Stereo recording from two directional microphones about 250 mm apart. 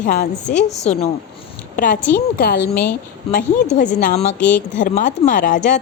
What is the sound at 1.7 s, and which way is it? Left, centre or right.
Speech, left.